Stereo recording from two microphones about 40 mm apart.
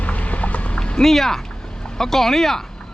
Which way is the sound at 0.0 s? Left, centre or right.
Left.